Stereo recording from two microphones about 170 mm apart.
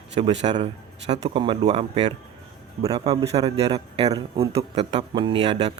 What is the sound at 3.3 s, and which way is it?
A man's voice, 35° right (ahead or behind).